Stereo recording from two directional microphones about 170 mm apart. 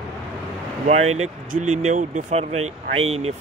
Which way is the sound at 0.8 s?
40° right (ahead or behind).